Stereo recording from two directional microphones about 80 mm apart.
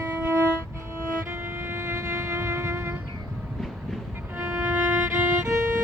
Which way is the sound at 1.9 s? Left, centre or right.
Right.